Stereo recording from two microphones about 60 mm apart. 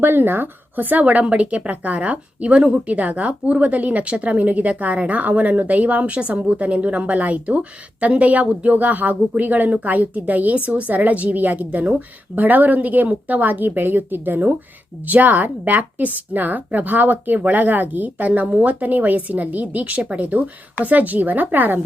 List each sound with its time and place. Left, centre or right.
0.0 s a woman's voice: right